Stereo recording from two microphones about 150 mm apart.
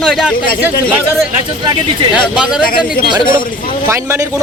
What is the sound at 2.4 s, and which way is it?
Speech, 5° right (ahead or behind).